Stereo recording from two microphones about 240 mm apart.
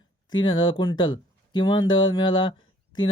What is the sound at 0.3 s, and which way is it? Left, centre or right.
Speech, centre.